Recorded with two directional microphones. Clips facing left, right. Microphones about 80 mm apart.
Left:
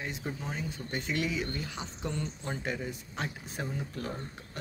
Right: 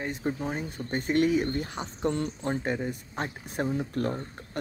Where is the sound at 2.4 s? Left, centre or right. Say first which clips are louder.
Right 6 dB; right.